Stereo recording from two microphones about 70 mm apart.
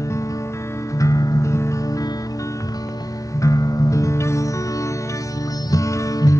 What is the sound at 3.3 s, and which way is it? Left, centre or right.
Music, left.